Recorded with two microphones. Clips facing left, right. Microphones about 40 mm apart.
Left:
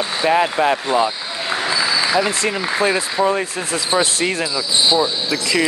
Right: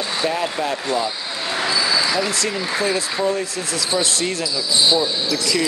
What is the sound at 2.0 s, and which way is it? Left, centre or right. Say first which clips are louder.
Speech: left 3 dB; left.